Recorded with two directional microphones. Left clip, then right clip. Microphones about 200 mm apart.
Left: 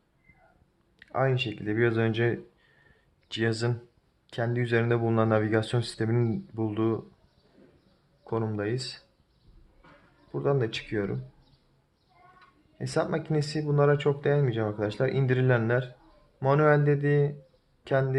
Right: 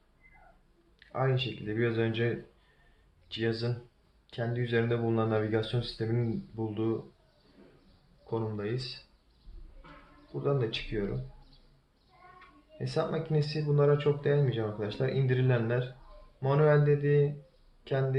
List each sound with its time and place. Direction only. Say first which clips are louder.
0.9 s speech: left 4 dB; 45° left (ahead or behind)
8.3 s speech: left 4 dB; 45° left (ahead or behind)
10.4 s speech: left 3 dB; 45° left (ahead or behind)
12.8 s speech: left 3 dB; 45° left (ahead or behind)